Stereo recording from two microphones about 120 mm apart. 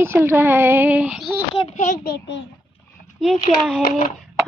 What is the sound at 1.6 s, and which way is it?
Speech, 70° left (ahead or behind).